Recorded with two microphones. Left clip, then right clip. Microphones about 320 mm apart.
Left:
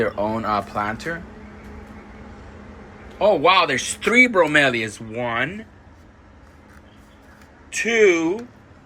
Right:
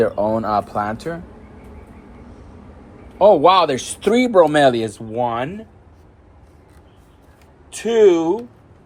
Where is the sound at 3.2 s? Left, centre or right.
Centre.